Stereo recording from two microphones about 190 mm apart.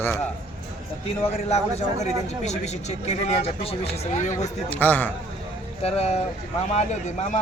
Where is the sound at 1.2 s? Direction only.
35° left (ahead or behind).